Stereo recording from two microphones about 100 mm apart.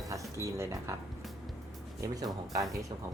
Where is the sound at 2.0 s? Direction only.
40° right (ahead or behind).